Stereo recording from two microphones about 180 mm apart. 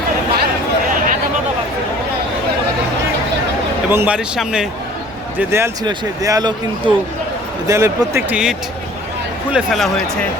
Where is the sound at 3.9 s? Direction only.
10° right (ahead or behind).